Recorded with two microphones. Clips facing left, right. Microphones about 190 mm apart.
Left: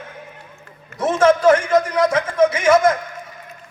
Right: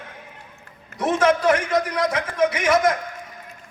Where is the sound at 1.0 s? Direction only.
50° left (ahead or behind).